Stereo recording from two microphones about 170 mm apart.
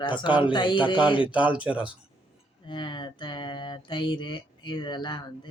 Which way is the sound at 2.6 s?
30° left (ahead or behind).